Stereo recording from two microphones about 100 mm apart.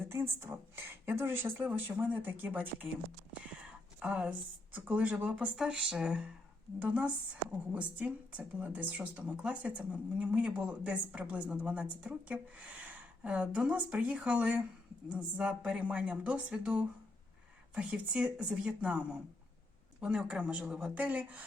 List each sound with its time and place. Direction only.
0.1 s speech: 25° right (ahead or behind)
4.0 s speech: 15° right (ahead or behind)